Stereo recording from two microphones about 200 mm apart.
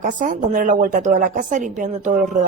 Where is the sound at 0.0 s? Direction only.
40° right (ahead or behind).